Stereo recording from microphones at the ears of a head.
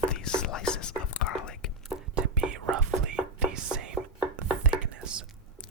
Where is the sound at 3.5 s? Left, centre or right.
Right.